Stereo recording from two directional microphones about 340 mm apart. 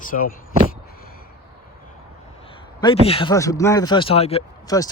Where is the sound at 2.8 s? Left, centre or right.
Centre.